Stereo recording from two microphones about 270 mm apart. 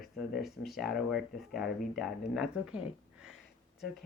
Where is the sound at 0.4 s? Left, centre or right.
Centre.